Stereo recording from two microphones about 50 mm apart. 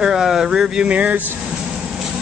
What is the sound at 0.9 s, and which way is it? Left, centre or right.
Speech, right.